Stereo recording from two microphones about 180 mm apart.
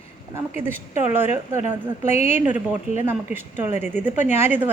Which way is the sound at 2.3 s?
10° right (ahead or behind).